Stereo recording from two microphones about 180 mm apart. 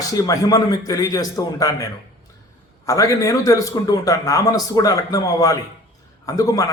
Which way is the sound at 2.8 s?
20° left (ahead or behind).